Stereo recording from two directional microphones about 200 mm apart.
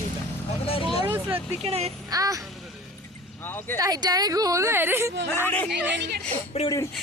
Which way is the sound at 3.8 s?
20° right (ahead or behind).